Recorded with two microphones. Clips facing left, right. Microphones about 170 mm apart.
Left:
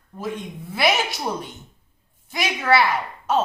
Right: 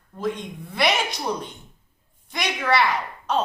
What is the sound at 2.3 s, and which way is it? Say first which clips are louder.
Speech: left 3 dB; 5° left (ahead or behind).